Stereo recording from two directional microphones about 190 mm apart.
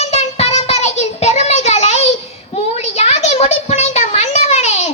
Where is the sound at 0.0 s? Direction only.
35° left (ahead or behind).